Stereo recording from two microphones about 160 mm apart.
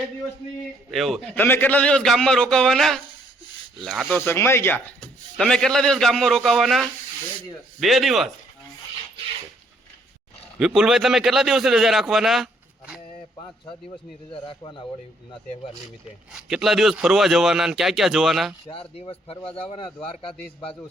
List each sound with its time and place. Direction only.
0.9 s a man's voice: centre (ahead or behind)
1.4 s a man's voice: 10° left (ahead or behind)
4.1 s a man's voice: 15° left (ahead or behind); by 8.3 s centre (ahead or behind)
10.6 s a man's voice: 5° right (ahead or behind)
14.3 s a man's voice: 30° left (ahead or behind)
16.3 s a man's voice: 5° right (ahead or behind)
18.7 s a man's voice: 35° left (ahead or behind)